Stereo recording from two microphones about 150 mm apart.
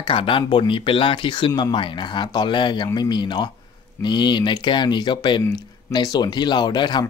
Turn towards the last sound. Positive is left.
turn(degrees=30)  # may be behind; listen again after turning